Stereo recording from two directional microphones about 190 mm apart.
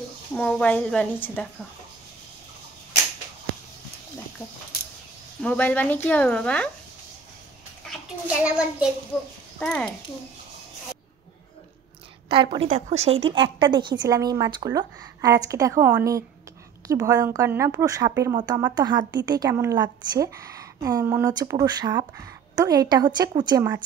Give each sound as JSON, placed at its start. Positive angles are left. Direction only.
{"t": 0.3, "sound": "a woman's voice", "side_deg": 5}
{"t": 5.4, "sound": "speech", "side_deg": 5}
{"t": 8.3, "sound": "a woman's voice", "side_deg": -5}
{"t": 9.6, "sound": "a child's voice", "side_deg": 5}
{"t": 12.3, "sound": "a woman's voice", "side_deg": -30}